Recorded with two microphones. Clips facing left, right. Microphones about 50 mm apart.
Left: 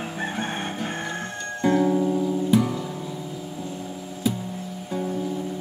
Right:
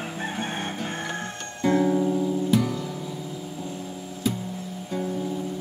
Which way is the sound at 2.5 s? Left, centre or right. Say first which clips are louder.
Left 2 dB; centre.